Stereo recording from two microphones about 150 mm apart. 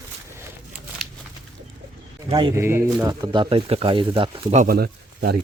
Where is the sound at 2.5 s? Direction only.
15° right (ahead or behind); by 4.5 s 35° right (ahead or behind).